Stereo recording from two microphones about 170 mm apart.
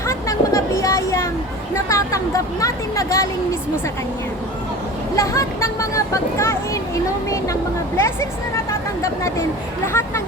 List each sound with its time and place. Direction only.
0.1 s vehicle: 20° left (ahead or behind)
1.7 s speech: 20° left (ahead or behind)
5.1 s speech: 20° left (ahead or behind)